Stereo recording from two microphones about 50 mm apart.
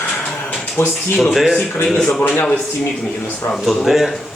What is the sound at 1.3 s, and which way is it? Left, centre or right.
Speech, centre.